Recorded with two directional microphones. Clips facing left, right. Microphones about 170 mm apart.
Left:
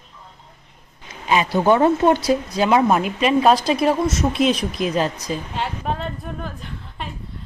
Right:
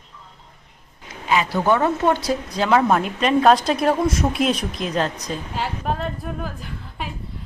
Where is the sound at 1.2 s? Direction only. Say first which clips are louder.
Left 2 dB; 20° left (ahead or behind).